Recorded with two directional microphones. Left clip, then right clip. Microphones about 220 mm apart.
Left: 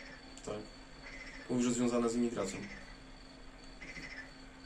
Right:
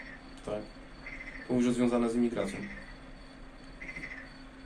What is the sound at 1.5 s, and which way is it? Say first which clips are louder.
Speech: right 5 dB; 15° left (ahead or behind).